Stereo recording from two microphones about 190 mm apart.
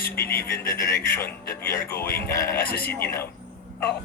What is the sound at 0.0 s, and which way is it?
Speech, 55° left (ahead or behind).